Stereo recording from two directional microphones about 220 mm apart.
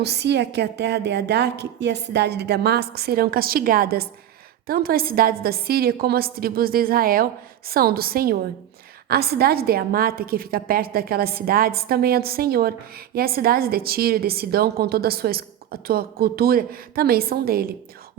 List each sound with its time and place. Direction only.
0.0 s a woman's voice: 50° right (ahead or behind)